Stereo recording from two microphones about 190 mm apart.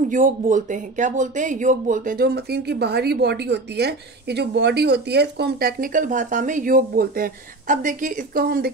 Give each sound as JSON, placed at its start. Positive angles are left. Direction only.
{"t": 0.1, "sound": "speech", "side_deg": -40}